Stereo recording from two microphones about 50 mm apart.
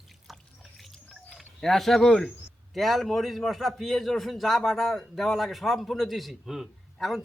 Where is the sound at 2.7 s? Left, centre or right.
Centre.